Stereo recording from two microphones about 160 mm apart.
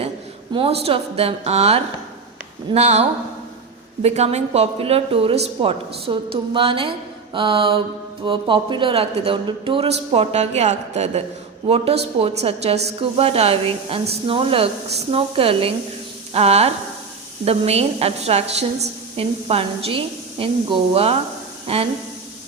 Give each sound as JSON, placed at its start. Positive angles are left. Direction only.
{"t": 0.5, "sound": "a woman's voice", "side_deg": -35}
{"t": 12.2, "sound": "speech", "side_deg": -40}